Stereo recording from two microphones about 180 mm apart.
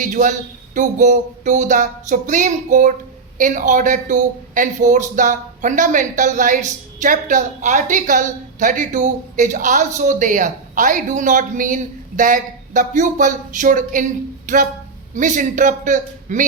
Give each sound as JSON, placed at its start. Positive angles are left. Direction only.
{"t": 0.0, "sound": "speech", "side_deg": -45}